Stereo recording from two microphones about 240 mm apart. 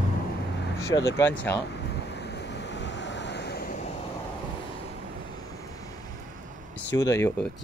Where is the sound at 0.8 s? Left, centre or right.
Centre.